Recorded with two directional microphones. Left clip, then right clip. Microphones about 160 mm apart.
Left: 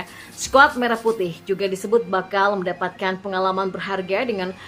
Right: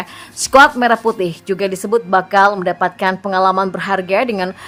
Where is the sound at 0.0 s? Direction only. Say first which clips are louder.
Right 7 dB; 35° right (ahead or behind).